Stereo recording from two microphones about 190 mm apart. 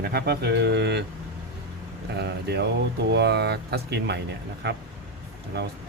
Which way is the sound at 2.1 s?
60° right (ahead or behind).